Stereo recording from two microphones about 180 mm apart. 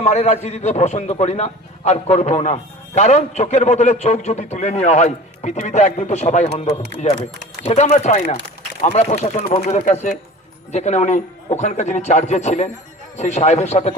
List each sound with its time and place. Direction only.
0.0 s a man's voice: 40° left (ahead or behind)